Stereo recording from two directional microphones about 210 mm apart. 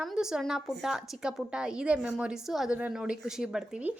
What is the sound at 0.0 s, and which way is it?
Speech, centre (ahead or behind).